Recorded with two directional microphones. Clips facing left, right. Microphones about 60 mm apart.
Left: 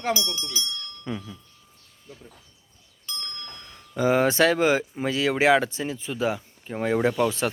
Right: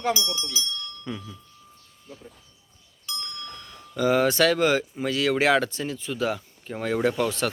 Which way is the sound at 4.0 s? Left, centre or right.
Left.